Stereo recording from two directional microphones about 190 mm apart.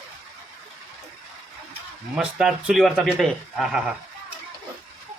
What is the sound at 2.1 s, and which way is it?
Speech, 5° right (ahead or behind).